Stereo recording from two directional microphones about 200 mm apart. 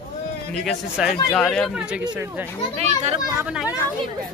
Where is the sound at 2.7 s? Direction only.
30° right (ahead or behind).